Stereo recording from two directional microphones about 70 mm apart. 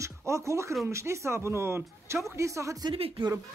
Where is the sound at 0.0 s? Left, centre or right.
Right.